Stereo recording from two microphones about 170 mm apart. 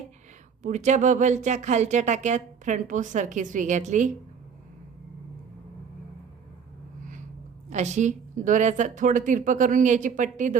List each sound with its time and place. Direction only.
0.6 s speech: 45° right (ahead or behind)
7.7 s speech: 45° right (ahead or behind)